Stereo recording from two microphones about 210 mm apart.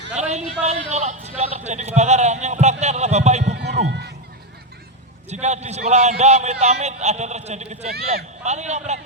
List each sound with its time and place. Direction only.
0.1 s a man's voice: 35° right (ahead or behind)
3.5 s run: 55° right (ahead or behind)
3.8 s speech: 55° right (ahead or behind)
5.3 s a man's voice: 30° right (ahead or behind)